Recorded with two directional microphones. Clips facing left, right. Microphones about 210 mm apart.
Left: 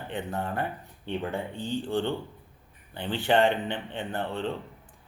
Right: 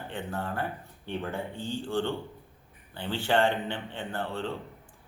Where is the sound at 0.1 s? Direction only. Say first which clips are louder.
Left 3 dB; 20° left (ahead or behind).